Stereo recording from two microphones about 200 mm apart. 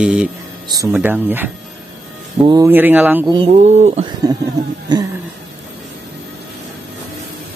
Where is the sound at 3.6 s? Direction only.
35° right (ahead or behind).